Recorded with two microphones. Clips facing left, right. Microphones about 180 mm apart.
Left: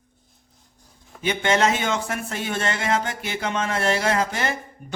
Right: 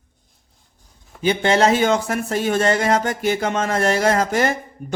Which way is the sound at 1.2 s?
35° right (ahead or behind).